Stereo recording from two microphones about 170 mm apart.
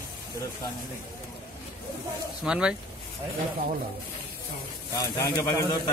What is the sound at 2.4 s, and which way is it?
Speech, 5° right (ahead or behind).